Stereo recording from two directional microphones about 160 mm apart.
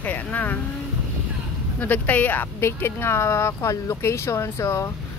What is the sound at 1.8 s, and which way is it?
Speech, 10° left (ahead or behind).